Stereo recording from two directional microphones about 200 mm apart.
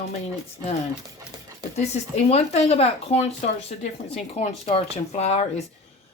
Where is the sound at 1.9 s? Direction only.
30° left (ahead or behind).